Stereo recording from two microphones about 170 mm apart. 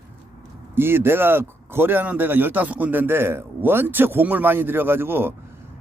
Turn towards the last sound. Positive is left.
turn(degrees=-15)  # may be behind; listen again after turning